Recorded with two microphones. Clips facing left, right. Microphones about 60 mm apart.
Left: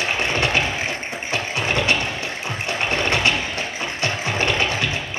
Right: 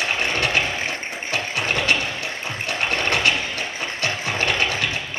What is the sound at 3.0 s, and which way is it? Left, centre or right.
Vehicle, left.